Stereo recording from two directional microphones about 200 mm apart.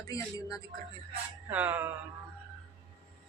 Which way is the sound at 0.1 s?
15° left (ahead or behind).